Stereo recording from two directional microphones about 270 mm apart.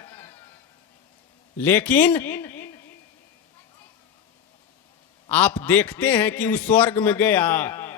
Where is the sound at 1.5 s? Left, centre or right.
Centre.